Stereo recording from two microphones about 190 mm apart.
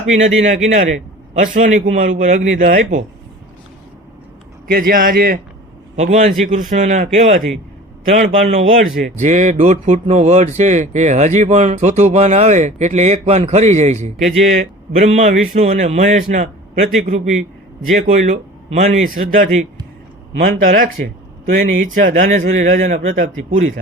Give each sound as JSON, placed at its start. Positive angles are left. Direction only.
{"t": 0.0, "sound": "speech", "side_deg": -35}
{"t": 4.7, "sound": "a man's voice", "side_deg": -50}